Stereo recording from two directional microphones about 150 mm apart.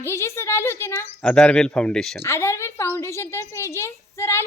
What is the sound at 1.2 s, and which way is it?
Speech, 5° left (ahead or behind).